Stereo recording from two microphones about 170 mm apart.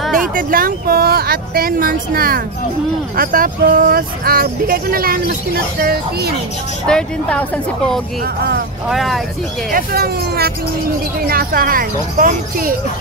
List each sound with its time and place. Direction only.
0.0 s a sound: centre (ahead or behind)
0.3 s speech: 55° right (ahead or behind)
6.9 s speech: 5° left (ahead or behind)
8.2 s speech: 70° right (ahead or behind)
8.8 s speech: centre (ahead or behind)
9.7 s speech: 60° right (ahead or behind)